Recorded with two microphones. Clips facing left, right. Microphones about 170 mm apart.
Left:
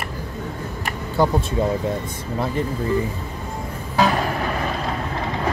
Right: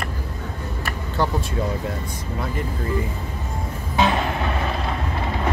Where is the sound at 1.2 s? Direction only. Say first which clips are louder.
Left 4 dB; 15° left (ahead or behind).